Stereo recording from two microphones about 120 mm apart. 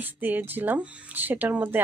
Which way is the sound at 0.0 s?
15° right (ahead or behind).